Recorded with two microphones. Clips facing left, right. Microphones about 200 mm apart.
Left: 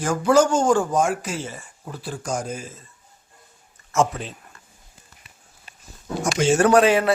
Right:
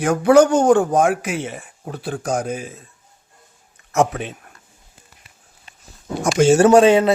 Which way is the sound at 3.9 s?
65° right (ahead or behind).